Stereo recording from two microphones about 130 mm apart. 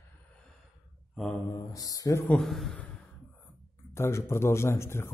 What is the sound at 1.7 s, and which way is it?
Speech, 25° left (ahead or behind).